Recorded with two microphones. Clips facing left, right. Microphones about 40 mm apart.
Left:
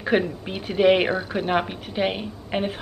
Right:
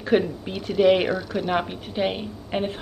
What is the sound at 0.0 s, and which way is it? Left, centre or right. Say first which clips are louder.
A woman's voice: right 1 dB; centre.